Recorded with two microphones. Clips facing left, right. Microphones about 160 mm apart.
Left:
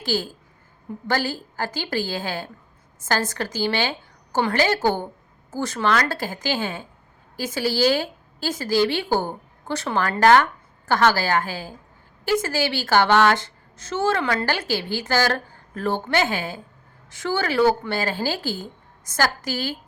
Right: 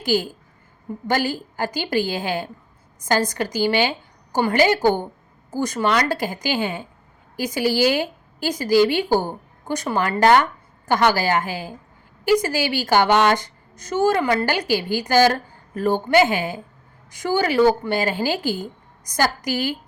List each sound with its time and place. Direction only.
0.0 s a woman's voice: 15° right (ahead or behind)